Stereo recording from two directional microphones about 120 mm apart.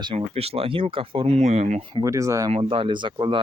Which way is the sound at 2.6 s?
45° right (ahead or behind).